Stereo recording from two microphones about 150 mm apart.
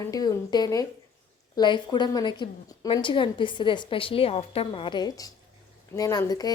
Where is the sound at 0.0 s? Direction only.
25° left (ahead or behind).